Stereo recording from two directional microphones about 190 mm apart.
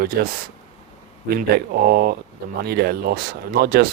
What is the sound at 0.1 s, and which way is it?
Speech, 55° right (ahead or behind).